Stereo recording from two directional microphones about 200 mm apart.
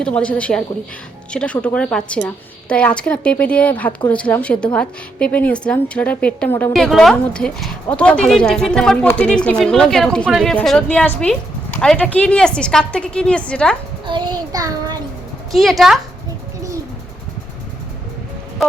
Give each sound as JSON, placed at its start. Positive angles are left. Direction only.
{"t": 0.0, "sound": "a woman's voice", "side_deg": 5}
{"t": 14.1, "sound": "child singing", "side_deg": -20}
{"t": 15.5, "sound": "a woman's voice", "side_deg": 0}
{"t": 18.6, "sound": "a woman's voice", "side_deg": 0}